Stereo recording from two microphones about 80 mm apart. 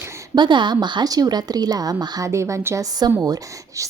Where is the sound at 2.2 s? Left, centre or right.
Right.